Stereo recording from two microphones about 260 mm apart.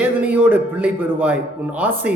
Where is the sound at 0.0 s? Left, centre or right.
Centre.